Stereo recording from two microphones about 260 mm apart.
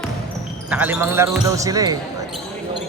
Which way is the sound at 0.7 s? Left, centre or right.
Centre.